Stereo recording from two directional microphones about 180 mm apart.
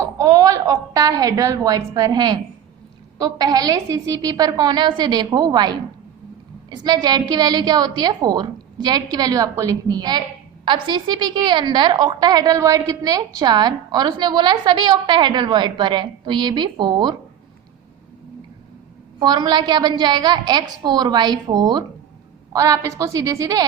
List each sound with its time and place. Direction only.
0.0 s a woman's voice: 20° right (ahead or behind)
19.2 s a woman's voice: 25° right (ahead or behind)